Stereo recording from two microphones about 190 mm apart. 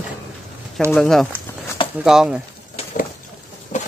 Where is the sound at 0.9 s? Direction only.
Centre (ahead or behind).